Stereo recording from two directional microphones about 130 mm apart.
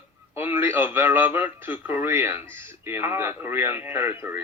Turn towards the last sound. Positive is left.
turn(degrees=-20)  # may be behind; listen again after turning